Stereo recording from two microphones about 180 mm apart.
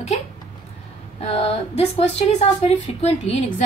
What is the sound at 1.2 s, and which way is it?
A woman's voice, 35° left (ahead or behind).